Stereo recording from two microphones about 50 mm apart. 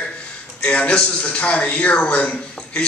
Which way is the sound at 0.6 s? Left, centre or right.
Left.